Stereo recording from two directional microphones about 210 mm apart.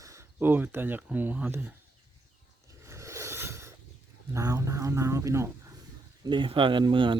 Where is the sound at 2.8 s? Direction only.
15° right (ahead or behind).